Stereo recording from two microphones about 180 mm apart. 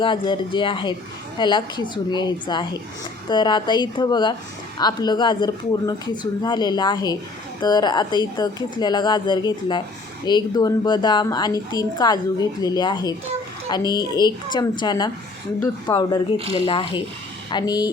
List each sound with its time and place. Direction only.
0.0 s a woman's voice: 25° left (ahead or behind)
16.4 s speech: 30° right (ahead or behind)
16.6 s a woman's voice: 30° left (ahead or behind)